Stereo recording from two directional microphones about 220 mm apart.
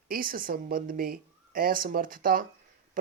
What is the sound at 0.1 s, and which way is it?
Speech, 40° right (ahead or behind).